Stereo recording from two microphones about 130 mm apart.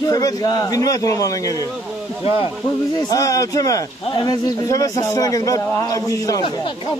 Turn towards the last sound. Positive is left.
turn(degrees=25)  # may be behind; listen again after turning